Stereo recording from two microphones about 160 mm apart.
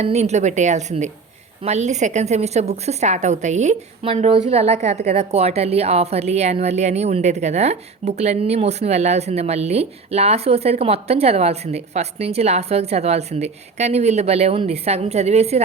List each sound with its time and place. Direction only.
0.0 s a woman's voice: 45° right (ahead or behind)